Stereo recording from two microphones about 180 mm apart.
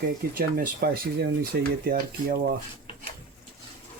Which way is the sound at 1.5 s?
75° right (ahead or behind).